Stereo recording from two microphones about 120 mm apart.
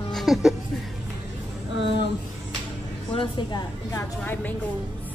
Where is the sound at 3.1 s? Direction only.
45° left (ahead or behind).